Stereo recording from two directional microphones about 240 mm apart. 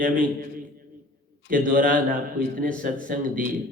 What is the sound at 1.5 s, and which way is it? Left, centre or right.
A man's voice, right.